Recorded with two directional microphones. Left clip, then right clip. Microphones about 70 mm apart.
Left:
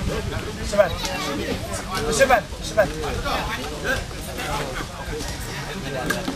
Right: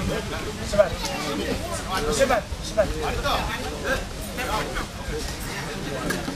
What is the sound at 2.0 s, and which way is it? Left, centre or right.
Speech, left.